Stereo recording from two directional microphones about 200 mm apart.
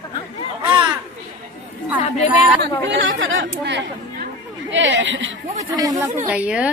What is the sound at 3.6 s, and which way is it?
Speech, 60° right (ahead or behind).